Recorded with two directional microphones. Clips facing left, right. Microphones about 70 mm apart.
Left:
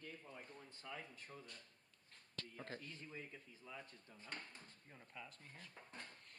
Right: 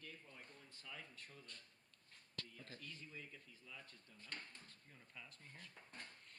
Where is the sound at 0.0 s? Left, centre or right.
Left.